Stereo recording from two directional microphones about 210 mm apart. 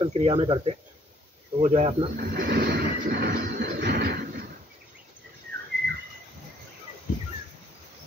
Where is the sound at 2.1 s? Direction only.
45° right (ahead or behind).